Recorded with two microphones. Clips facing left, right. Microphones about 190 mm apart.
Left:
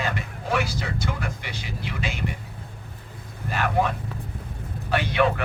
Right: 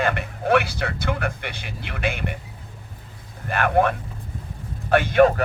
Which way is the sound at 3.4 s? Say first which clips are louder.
Right 4 dB; 60° right (ahead or behind).